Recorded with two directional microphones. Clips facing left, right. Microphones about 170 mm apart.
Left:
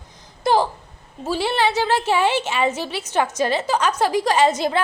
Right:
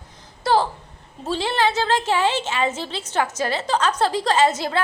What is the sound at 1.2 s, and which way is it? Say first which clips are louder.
A woman's voice: left 1 dB; 10° left (ahead or behind).